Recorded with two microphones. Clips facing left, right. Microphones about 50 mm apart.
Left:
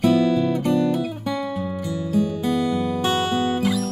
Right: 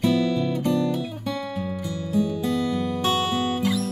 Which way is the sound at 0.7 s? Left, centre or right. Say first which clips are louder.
Left 4 dB; left.